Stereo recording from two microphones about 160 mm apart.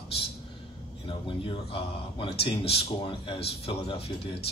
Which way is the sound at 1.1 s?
30° left (ahead or behind).